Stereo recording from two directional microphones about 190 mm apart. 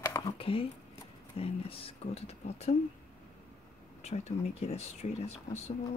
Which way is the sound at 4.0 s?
35° left (ahead or behind).